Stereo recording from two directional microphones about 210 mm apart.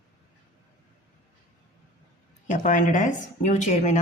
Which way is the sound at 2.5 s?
35° left (ahead or behind).